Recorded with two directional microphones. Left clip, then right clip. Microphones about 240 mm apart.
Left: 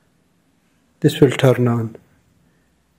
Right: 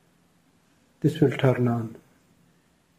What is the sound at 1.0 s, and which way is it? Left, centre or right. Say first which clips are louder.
Speech: left 8 dB; left.